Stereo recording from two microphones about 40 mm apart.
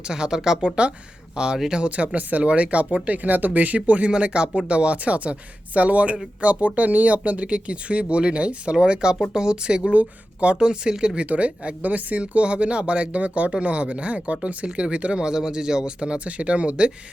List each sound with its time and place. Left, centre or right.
0.1 s speech: centre
11.3 s speech: right
15.2 s speech: centre